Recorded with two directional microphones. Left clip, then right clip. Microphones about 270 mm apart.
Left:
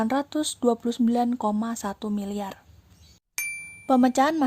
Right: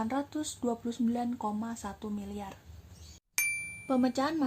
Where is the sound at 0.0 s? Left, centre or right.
Left.